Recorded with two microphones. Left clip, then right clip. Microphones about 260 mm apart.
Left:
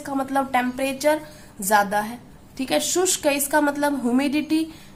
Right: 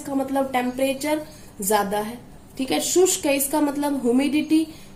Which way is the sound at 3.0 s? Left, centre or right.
Left.